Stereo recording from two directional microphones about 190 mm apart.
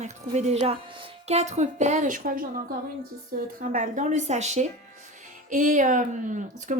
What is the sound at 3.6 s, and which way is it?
Speech, 45° right (ahead or behind).